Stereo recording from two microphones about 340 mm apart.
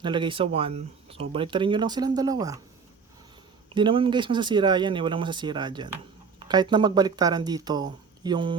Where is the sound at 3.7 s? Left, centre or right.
Centre.